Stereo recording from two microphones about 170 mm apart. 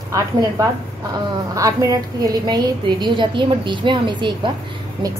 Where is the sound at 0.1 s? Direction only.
20° right (ahead or behind).